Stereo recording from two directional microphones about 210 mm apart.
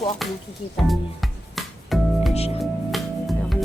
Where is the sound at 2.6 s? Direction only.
Centre (ahead or behind).